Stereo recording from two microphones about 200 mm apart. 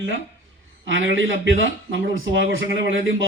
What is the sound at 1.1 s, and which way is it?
A man's voice, 70° right (ahead or behind).